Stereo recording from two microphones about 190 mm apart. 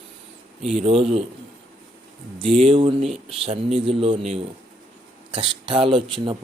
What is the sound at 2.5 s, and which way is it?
A man's voice, 30° right (ahead or behind).